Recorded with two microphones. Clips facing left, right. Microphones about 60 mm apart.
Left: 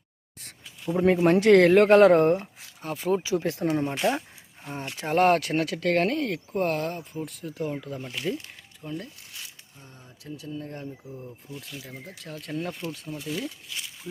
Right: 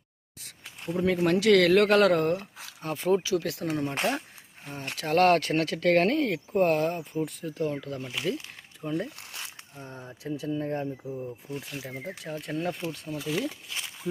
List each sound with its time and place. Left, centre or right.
0.9 s speech: left
2.8 s speech: centre
3.2 s speech: left
4.9 s speech: centre
8.0 s speech: centre
9.0 s a sound: right
9.8 s speech: right
11.1 s speech: centre
11.5 s speech: right
12.4 s speech: centre
13.2 s speech: right
13.7 s speech: right